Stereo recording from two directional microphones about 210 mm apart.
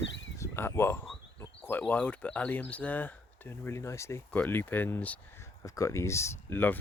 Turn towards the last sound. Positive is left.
turn(degrees=10)  # may be behind; listen again after turning